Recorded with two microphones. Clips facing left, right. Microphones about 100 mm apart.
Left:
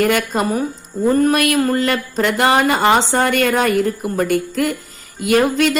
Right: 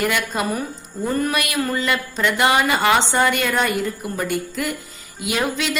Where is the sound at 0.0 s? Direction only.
50° left (ahead or behind).